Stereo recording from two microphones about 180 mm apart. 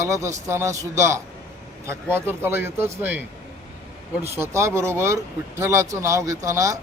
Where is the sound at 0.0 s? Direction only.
15° right (ahead or behind).